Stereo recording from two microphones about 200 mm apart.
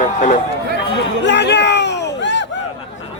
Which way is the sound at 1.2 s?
60° left (ahead or behind).